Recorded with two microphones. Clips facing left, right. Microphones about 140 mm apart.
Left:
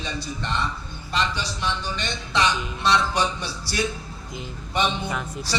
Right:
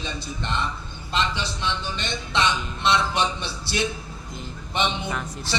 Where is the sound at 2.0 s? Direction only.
25° right (ahead or behind).